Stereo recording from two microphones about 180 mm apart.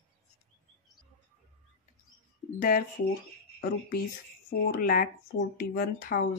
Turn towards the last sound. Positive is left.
turn(degrees=55)  # may be behind; listen again after turning